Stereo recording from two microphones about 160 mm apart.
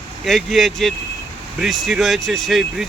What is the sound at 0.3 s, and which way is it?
Speech, centre (ahead or behind).